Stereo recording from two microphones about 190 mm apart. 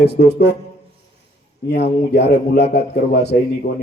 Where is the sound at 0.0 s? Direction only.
60° left (ahead or behind).